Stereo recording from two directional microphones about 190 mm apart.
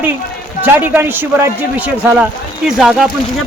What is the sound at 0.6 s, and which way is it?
A man's voice, 10° right (ahead or behind).